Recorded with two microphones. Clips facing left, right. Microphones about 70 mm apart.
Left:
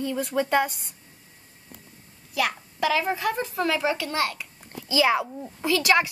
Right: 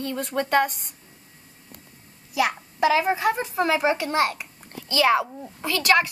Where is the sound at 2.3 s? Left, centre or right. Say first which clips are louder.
Right 3 dB; centre.